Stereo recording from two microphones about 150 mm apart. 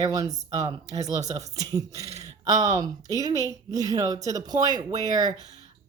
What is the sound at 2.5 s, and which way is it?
Speech, 50° right (ahead or behind).